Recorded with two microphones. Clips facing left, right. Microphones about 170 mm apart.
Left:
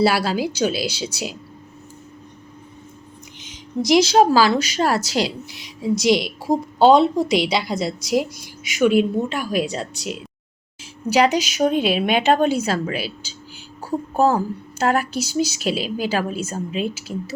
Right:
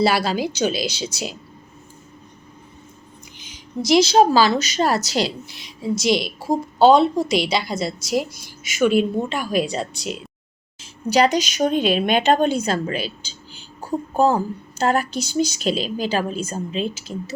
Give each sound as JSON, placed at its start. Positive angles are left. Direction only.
{"t": 0.0, "sound": "a woman's voice", "side_deg": 10}
{"t": 3.4, "sound": "a woman's voice", "side_deg": 20}
{"t": 11.1, "sound": "a woman's voice", "side_deg": 10}